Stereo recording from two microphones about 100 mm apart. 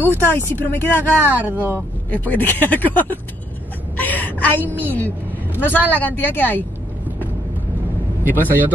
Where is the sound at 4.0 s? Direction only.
15° left (ahead or behind).